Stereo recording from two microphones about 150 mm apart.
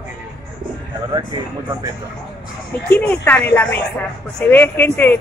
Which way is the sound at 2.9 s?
10° left (ahead or behind).